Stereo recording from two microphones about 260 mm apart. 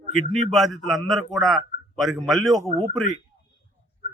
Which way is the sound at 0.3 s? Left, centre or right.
Right.